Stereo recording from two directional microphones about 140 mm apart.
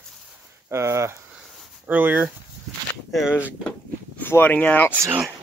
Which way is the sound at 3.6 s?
10° left (ahead or behind).